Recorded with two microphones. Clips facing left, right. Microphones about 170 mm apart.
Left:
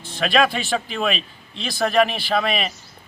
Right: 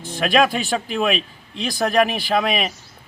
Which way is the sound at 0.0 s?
40° right (ahead or behind).